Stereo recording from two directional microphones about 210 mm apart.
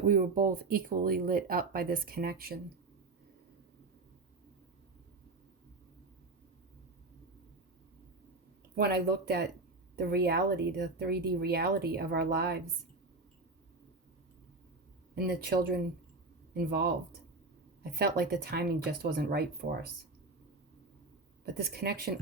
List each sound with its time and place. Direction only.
0.0 s speech: 40° right (ahead or behind)
8.7 s speech: 50° right (ahead or behind)
15.1 s speech: 50° right (ahead or behind)
17.9 s speech: 50° right (ahead or behind)
21.4 s speech: 50° right (ahead or behind)